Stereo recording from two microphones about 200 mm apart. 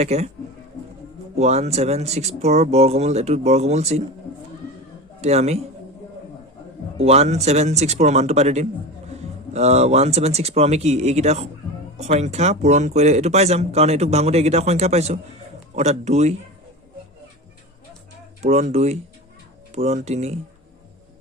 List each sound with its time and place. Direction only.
0.0 s speech: 35° right (ahead or behind)
1.4 s speech: 35° right (ahead or behind)
5.2 s speech: 30° right (ahead or behind)
6.9 s speech: 30° right (ahead or behind)
18.4 s speech: 35° right (ahead or behind)